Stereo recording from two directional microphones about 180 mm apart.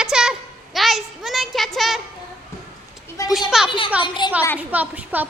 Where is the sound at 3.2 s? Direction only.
15° left (ahead or behind).